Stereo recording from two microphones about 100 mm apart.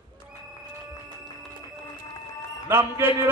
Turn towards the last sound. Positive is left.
turn(degrees=-25)  # may be behind; listen again after turning